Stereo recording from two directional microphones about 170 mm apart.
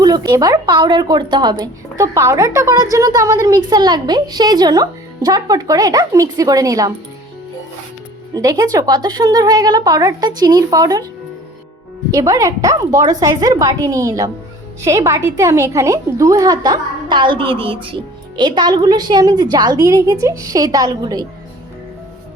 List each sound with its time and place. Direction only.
0.0 s a woman's voice: 25° right (ahead or behind)
8.3 s a woman's voice: 20° right (ahead or behind)
12.1 s a woman's voice: 20° right (ahead or behind)